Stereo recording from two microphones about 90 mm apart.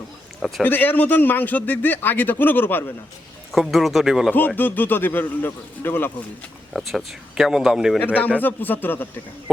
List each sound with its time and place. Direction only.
0.6 s speech: 20° left (ahead or behind)
3.5 s speech: centre (ahead or behind)
4.3 s speech: 20° left (ahead or behind)
6.7 s speech: centre (ahead or behind)
7.9 s speech: 20° left (ahead or behind)